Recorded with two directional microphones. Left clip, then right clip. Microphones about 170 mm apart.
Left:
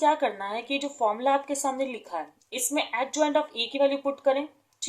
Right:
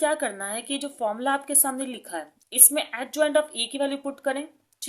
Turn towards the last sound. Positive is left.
turn(degrees=-45)  # may be behind; listen again after turning